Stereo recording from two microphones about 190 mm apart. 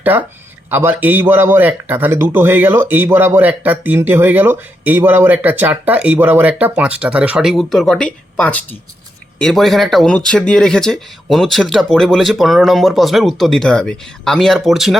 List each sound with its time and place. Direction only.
0.0 s speech: 10° right (ahead or behind)